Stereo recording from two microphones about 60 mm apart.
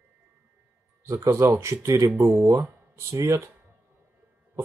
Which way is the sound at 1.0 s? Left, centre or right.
Right.